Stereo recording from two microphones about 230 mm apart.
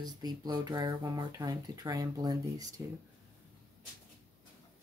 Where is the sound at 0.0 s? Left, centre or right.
Centre.